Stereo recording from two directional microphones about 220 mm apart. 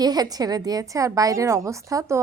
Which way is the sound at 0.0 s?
15° right (ahead or behind).